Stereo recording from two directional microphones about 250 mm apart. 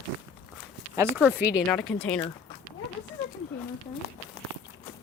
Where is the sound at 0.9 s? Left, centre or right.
Centre.